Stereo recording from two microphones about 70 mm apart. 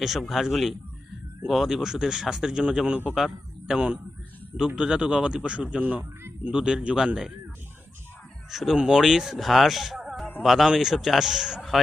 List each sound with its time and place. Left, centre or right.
0.0 s a man's voice: centre
8.4 s speech: centre